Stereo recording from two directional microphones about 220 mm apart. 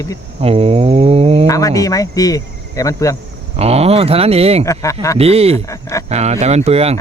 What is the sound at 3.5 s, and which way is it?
Speech, 30° right (ahead or behind).